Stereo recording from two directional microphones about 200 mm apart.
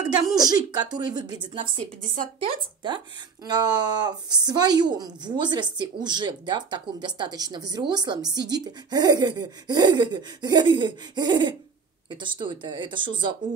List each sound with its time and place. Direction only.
0.1 s speech: 20° right (ahead or behind)